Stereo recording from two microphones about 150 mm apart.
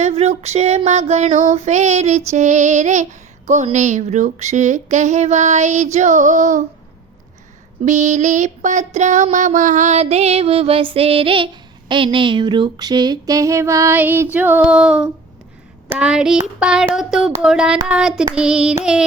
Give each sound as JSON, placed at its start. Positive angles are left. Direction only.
{"t": 0.0, "sound": "female singing", "side_deg": -45}
{"t": 7.9, "sound": "female singing", "side_deg": -55}
{"t": 11.9, "sound": "a sound", "side_deg": -35}